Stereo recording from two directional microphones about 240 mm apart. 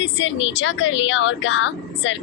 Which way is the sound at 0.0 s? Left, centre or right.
Left.